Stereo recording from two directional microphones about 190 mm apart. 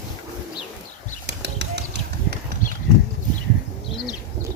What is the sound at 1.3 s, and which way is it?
Bird flight, 60° right (ahead or behind).